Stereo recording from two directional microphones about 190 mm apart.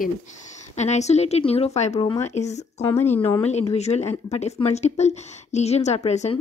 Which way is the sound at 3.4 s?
35° left (ahead or behind).